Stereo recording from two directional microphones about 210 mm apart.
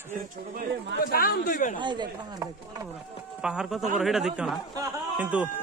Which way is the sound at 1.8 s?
20° right (ahead or behind).